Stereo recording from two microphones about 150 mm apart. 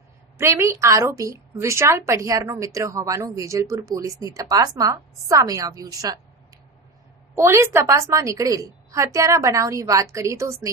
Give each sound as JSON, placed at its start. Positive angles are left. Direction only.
{"t": 0.3, "sound": "a woman's voice", "side_deg": -20}
{"t": 7.3, "sound": "a woman's voice", "side_deg": -20}